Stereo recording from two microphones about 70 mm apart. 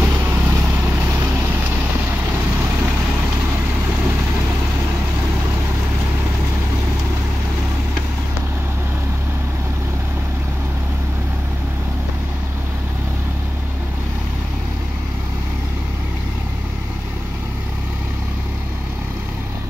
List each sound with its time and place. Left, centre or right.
0.0 s vehicle: right